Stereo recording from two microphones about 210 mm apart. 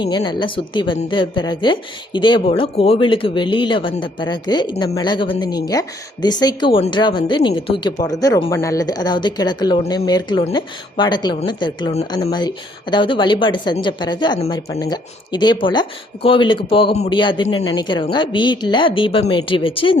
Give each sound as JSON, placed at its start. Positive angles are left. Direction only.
{"t": 0.0, "sound": "speech", "side_deg": 20}